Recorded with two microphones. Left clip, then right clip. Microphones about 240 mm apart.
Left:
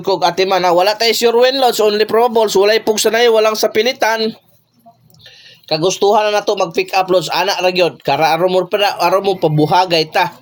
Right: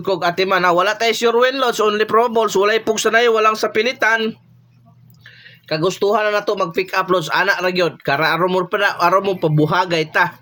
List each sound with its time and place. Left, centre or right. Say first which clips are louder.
0.0 s speech: left 4 dB; centre
5.6 s speech: left 4 dB; centre